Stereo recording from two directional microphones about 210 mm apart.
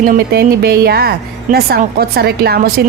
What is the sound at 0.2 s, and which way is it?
A woman's voice, 50° right (ahead or behind).